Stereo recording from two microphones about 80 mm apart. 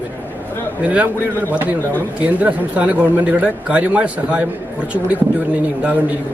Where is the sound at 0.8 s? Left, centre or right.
Centre.